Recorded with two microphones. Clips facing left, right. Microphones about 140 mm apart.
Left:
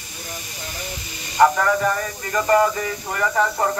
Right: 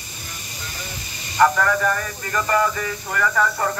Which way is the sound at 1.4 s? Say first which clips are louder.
Left 1 dB; 20° left (ahead or behind).